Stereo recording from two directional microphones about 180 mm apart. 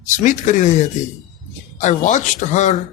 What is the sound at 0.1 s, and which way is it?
Speech, 45° left (ahead or behind).